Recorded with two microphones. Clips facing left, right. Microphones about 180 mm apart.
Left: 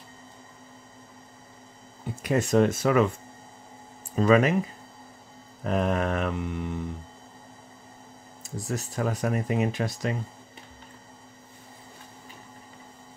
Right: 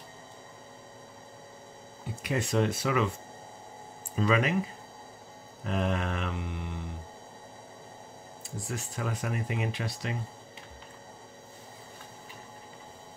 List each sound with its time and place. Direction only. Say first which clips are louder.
2.2 s mantra: left 6 dB; 45° left (ahead or behind)
4.1 s mantra: left 7 dB; 45° left (ahead or behind)
5.6 s mantra: left 5 dB; 45° left (ahead or behind)
8.4 s speech: left 5 dB; 40° left (ahead or behind)